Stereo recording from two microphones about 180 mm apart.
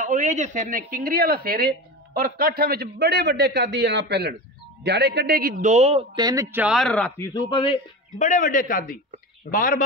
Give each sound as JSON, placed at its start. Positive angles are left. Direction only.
{"t": 0.0, "sound": "speech", "side_deg": -45}
{"t": 6.1, "sound": "speech", "side_deg": -20}
{"t": 6.5, "sound": "speech", "side_deg": -5}
{"t": 7.2, "sound": "speech", "side_deg": 25}
{"t": 8.2, "sound": "a man's voice", "side_deg": 45}